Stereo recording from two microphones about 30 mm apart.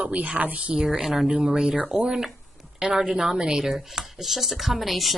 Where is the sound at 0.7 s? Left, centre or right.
Right.